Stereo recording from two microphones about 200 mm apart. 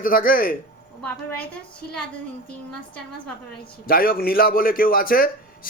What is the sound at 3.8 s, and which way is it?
A man's voice, 45° left (ahead or behind).